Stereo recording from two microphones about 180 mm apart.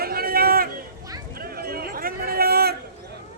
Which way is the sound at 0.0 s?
55° right (ahead or behind).